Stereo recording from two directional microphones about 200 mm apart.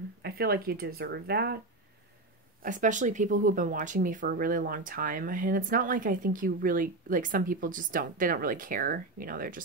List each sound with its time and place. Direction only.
0.2 s speech: 50° right (ahead or behind)
2.6 s speech: 40° right (ahead or behind)